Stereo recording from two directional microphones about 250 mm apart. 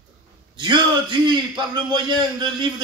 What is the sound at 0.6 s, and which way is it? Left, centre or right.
A man's voice, centre.